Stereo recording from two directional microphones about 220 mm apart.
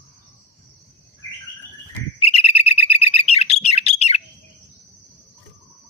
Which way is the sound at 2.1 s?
25° left (ahead or behind).